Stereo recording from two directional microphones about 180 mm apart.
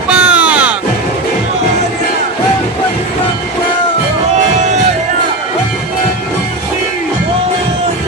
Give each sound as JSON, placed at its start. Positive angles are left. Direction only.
{"t": 0.1, "sound": "music", "side_deg": -5}
{"t": 4.4, "sound": "music", "side_deg": -40}